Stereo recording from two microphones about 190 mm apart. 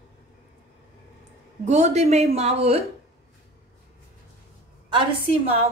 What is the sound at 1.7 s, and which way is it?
Speech, 35° right (ahead or behind).